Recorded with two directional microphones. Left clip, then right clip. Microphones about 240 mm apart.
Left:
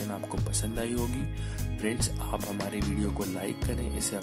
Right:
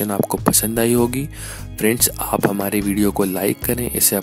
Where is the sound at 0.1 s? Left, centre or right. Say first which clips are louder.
Right 16 dB; right.